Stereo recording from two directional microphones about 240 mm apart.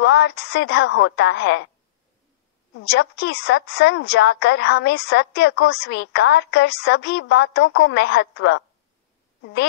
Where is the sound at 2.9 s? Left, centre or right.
Left.